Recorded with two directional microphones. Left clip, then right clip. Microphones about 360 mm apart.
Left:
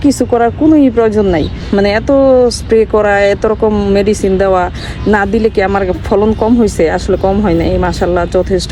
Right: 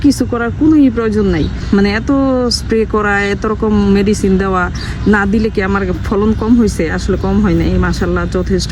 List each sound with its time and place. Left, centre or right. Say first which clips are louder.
0.0 s speech: left 4 dB; centre